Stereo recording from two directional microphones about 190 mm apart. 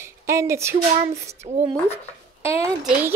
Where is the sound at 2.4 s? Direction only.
15° right (ahead or behind).